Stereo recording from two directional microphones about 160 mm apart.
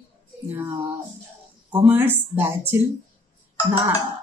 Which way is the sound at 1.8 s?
15° right (ahead or behind).